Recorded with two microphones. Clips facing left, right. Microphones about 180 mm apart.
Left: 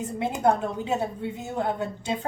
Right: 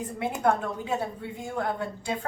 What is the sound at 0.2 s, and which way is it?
A woman's voice, 20° left (ahead or behind).